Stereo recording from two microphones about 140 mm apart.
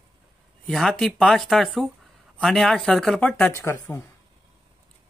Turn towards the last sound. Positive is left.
turn(degrees=20)  # may be behind; listen again after turning